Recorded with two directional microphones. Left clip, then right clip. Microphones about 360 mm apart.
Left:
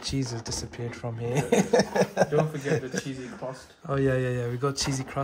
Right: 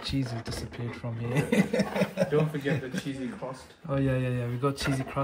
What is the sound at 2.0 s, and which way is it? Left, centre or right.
Speech, left.